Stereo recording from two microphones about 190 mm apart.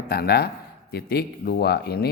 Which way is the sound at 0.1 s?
55° left (ahead or behind).